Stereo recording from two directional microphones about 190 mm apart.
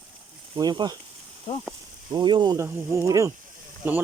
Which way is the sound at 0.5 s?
20° right (ahead or behind).